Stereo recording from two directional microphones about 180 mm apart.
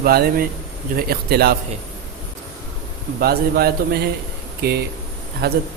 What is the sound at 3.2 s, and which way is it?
A man's voice, 60° right (ahead or behind).